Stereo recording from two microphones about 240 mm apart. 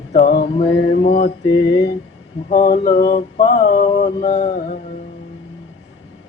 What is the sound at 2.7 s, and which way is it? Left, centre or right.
Mantra, left.